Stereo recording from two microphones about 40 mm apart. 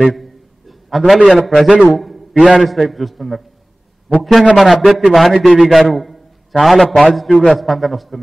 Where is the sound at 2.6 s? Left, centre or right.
Centre.